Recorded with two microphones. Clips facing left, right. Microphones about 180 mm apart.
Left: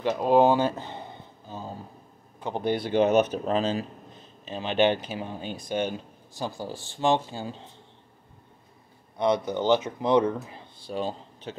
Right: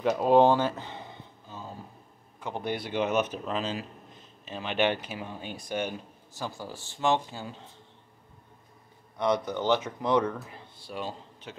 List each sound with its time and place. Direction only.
0.0 s speech: centre (ahead or behind)
2.4 s speech: 30° left (ahead or behind)
4.5 s speech: 30° left (ahead or behind)
9.2 s speech: 20° left (ahead or behind)